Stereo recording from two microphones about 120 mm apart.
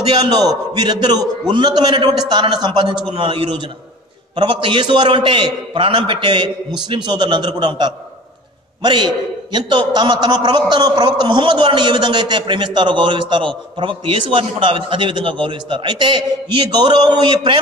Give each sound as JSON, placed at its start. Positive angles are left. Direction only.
{"t": 0.1, "sound": "a man's voice", "side_deg": -35}